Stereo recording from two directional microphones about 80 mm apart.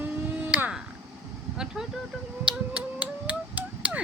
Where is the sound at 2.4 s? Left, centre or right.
Centre.